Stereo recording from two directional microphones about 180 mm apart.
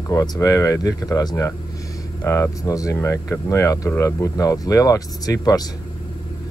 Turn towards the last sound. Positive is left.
turn(degrees=20)  # may be behind; listen again after turning